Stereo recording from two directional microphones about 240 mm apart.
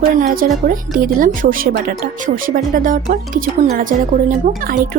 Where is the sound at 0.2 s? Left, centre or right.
Right.